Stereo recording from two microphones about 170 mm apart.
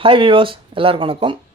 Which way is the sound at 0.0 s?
30° right (ahead or behind).